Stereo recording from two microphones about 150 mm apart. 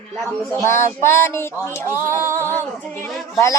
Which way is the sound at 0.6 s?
20° left (ahead or behind).